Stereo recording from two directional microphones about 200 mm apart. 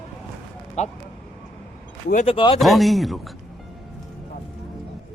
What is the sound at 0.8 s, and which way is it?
Speech, 35° left (ahead or behind).